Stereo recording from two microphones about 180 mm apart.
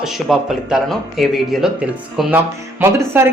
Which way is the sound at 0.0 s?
Centre (ahead or behind).